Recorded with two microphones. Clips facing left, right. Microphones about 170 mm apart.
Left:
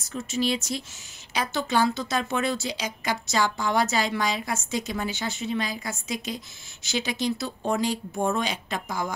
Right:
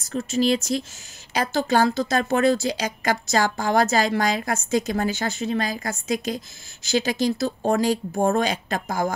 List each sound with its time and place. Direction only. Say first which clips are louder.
0.1 s speech: right 6 dB; 40° right (ahead or behind)
1.6 s speech: right 4 dB; 40° right (ahead or behind)